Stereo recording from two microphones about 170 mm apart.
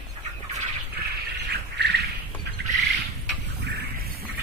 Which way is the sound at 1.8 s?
80° right.